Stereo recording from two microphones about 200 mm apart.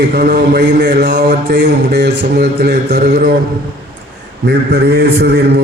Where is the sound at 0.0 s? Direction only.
55° right (ahead or behind).